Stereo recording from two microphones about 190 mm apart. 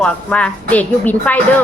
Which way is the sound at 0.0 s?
5° left (ahead or behind).